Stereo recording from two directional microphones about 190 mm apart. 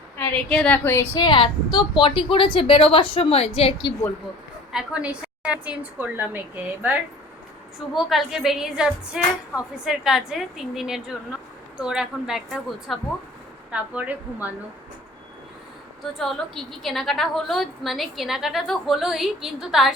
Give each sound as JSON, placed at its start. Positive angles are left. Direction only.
{"t": 0.2, "sound": "a woman's voice", "side_deg": 5}
{"t": 4.7, "sound": "a woman's voice", "side_deg": -5}
{"t": 7.8, "sound": "a woman's voice", "side_deg": 0}
{"t": 16.1, "sound": "a woman's voice", "side_deg": 0}